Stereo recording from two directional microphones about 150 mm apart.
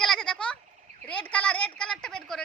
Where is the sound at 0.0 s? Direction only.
5° left (ahead or behind).